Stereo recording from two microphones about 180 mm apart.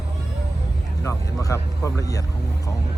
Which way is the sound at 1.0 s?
15° left (ahead or behind).